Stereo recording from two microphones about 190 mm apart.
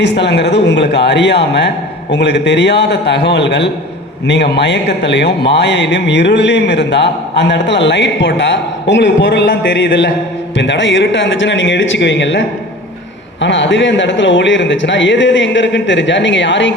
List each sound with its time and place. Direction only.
0.0 s speech: 60° left (ahead or behind)